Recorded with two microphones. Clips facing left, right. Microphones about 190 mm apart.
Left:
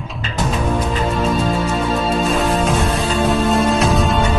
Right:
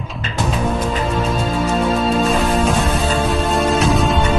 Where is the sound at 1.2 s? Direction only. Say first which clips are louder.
Left 1 dB; centre (ahead or behind).